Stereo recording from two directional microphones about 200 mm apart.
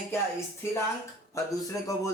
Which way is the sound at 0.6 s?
15° left (ahead or behind).